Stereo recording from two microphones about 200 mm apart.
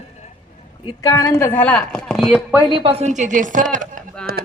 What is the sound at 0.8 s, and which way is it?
Speech, 15° left (ahead or behind).